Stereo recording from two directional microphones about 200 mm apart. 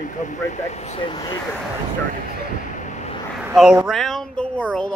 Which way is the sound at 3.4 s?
5° right (ahead or behind).